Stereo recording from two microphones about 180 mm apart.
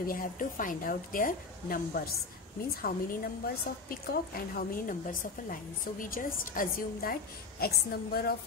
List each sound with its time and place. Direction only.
0.0 s a woman's voice: 50° left (ahead or behind)
2.8 s a woman's voice: 55° left (ahead or behind)